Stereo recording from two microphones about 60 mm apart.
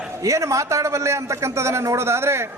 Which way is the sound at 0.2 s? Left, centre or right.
Right.